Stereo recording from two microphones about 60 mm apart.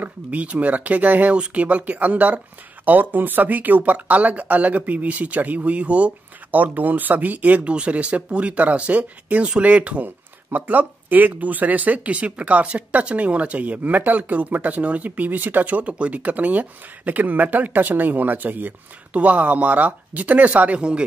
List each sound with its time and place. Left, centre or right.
0.0 s speech: right